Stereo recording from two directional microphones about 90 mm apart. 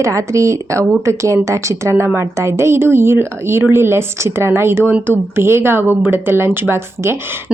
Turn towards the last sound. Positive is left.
turn(degrees=-25)  # may be behind; listen again after turning